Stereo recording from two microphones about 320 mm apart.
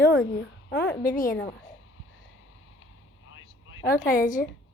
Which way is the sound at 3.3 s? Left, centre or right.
Left.